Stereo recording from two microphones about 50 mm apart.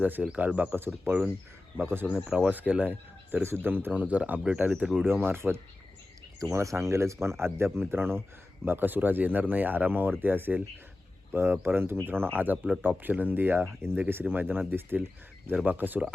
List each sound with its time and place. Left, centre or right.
0.0 s speech: right
2.1 s speech: centre
2.5 s speech: right
3.4 s speech: right
3.9 s speech: right
5.0 s speech: right
6.5 s speech: right